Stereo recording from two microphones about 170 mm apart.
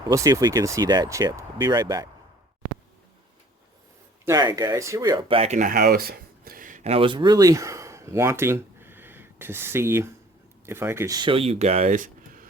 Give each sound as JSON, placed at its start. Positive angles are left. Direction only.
{"t": 0.1, "sound": "speech", "side_deg": -20}
{"t": 4.3, "sound": "speech", "side_deg": -20}
{"t": 5.3, "sound": "speech", "side_deg": -40}